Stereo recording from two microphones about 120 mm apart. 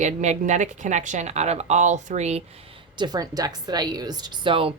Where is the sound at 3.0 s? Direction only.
35° right (ahead or behind).